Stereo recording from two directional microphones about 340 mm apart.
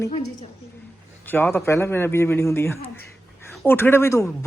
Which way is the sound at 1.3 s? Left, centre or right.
Centre.